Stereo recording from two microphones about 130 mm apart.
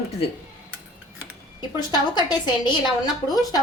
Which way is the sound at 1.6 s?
35° left (ahead or behind).